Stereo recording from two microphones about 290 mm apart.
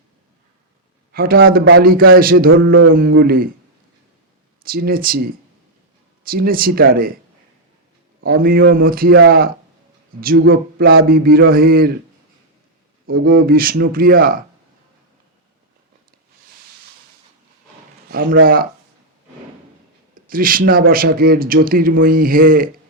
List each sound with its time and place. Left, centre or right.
1.1 s a man's voice: right
4.6 s a man's voice: right
8.2 s a man's voice: right
13.2 s a man's voice: right
18.1 s a man's voice: right
20.2 s speech: right